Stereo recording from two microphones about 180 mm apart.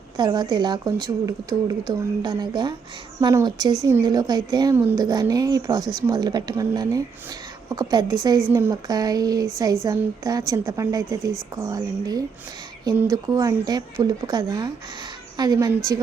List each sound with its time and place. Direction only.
0.2 s speech: 25° right (ahead or behind)